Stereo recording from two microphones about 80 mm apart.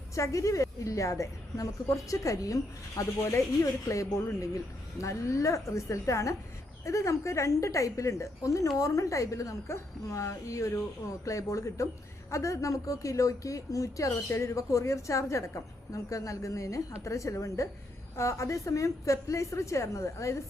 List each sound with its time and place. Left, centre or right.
0.1 s a woman's voice: left